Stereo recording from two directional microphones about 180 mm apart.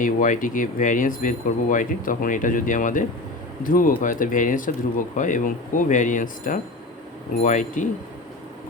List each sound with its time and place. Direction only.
0.0 s speech: 50° left (ahead or behind)